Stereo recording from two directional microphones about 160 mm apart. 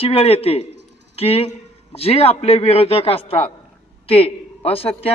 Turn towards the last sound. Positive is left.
turn(degrees=35)  # may be behind; listen again after turning